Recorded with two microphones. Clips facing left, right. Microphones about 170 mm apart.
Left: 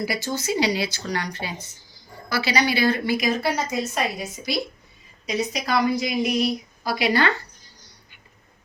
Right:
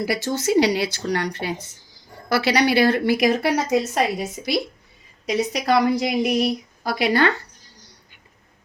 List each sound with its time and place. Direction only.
0.1 s a woman's voice: 70° right (ahead or behind)
5.2 s speech: 65° right (ahead or behind)